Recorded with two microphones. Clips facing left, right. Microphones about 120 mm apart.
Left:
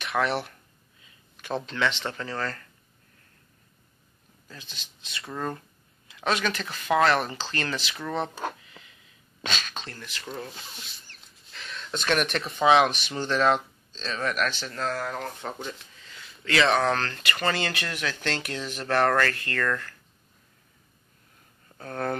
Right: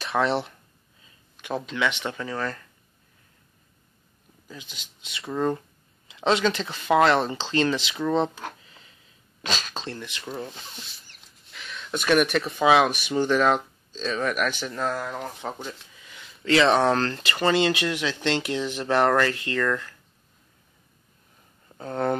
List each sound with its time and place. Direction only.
0.0 s speech: 25° right (ahead or behind)
1.4 s speech: 10° right (ahead or behind)
4.5 s speech: 15° right (ahead or behind)
8.6 s a sound: 35° right (ahead or behind)
9.5 s speech: 35° right (ahead or behind)
11.5 s a sound: centre (ahead or behind)
11.9 s speech: 10° right (ahead or behind)
16.4 s speech: 30° right (ahead or behind)
17.5 s speech: 20° right (ahead or behind)
21.7 s speech: 20° right (ahead or behind)